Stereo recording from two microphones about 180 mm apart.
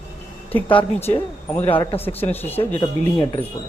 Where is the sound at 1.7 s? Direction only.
30° left (ahead or behind).